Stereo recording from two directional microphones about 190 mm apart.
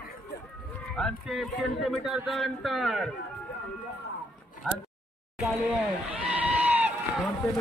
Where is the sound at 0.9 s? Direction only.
Centre (ahead or behind).